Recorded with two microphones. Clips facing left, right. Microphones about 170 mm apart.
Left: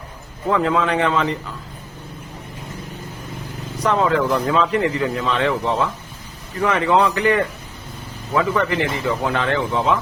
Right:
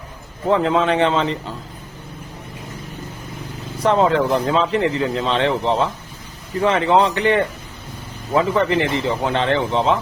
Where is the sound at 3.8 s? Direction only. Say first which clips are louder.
Right 2 dB; 30° right (ahead or behind).